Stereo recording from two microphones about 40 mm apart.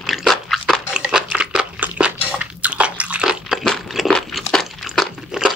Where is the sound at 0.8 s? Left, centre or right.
Right.